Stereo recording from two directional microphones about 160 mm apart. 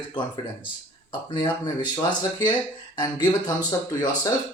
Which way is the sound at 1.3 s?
30° left (ahead or behind).